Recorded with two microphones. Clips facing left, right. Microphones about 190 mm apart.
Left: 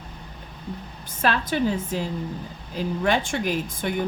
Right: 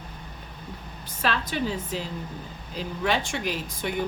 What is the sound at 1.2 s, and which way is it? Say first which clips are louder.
Speech: left 4 dB; 50° left (ahead or behind).